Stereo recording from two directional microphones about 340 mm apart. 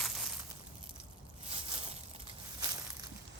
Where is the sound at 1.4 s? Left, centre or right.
Centre.